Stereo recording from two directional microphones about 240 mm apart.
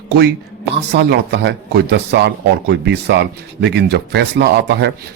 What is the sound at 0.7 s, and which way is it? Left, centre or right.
A man's voice, right.